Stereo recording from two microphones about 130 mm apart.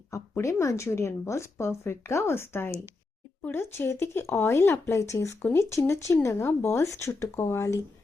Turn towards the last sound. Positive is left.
turn(degrees=25)  # may be behind; listen again after turning